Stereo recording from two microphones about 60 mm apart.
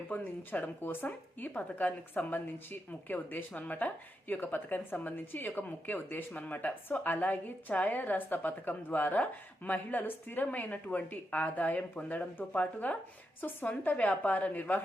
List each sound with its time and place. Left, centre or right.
0.1 s a woman's voice: left
13.9 s speech: left